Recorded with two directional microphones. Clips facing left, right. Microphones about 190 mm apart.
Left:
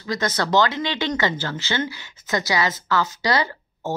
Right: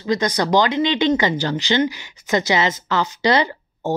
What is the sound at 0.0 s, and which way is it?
A woman's voice, 20° right (ahead or behind).